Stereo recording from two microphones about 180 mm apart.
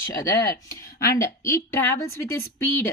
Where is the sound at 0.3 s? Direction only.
20° left (ahead or behind).